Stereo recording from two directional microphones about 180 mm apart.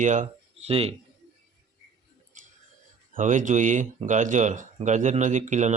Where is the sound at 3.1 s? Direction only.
45° right (ahead or behind).